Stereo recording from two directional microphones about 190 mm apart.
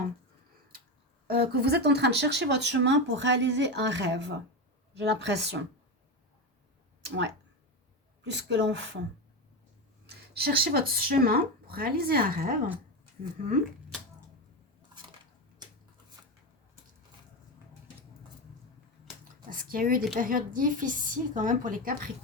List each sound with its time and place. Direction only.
1.3 s speech: 55° right (ahead or behind)
7.0 s a woman's voice: 65° right (ahead or behind)
10.3 s a woman's voice: 55° right (ahead or behind)
19.5 s a woman's voice: 50° right (ahead or behind)